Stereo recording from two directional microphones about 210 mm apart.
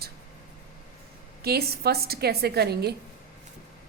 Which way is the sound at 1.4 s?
45° right (ahead or behind).